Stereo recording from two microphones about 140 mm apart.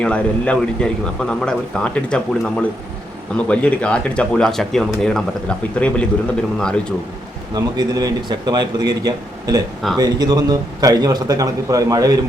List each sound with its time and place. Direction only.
0.0 s a man's voice: 5° left (ahead or behind)
7.5 s a man's voice: 25° right (ahead or behind)